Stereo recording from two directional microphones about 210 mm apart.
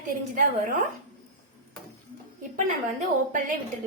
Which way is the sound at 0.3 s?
40° right (ahead or behind).